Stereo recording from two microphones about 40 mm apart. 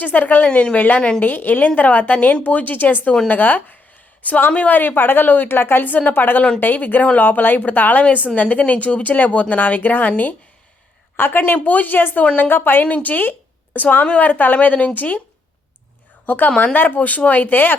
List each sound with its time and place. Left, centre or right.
0.0 s speech: left
0.4 s a woman's voice: left
0.8 s speech: left
2.1 s speech: left
2.4 s a woman's voice: left
5.9 s speech: left
11.2 s a woman's voice: left
11.5 s a woman's voice: left
12.8 s speech: left
16.2 s a woman's voice: left